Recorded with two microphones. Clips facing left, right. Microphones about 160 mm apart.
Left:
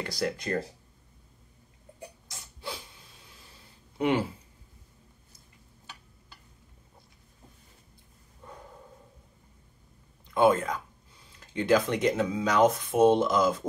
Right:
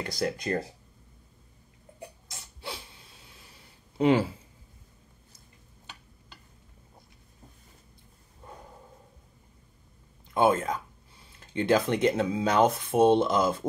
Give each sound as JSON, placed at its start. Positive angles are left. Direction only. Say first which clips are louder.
{"t": 0.0, "sound": "speech", "louder": "right 1 dB", "side_deg": -20}
{"t": 10.3, "sound": "speech", "louder": "left 1 dB", "side_deg": -25}